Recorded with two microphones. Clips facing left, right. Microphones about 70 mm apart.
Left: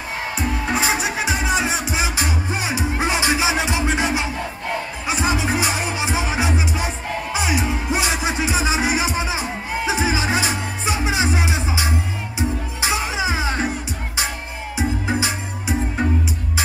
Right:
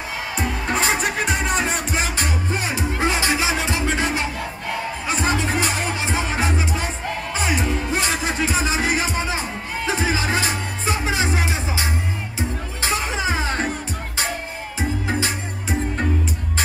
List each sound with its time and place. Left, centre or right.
0.4 s music: centre